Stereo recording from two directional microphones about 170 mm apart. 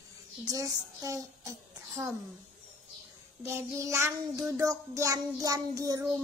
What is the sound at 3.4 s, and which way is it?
Child singing, 15° right (ahead or behind).